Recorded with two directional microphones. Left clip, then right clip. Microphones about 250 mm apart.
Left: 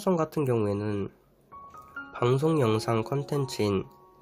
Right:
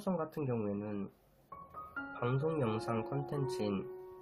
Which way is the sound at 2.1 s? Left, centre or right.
Left.